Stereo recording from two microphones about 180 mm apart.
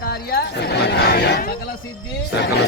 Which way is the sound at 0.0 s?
60° left (ahead or behind).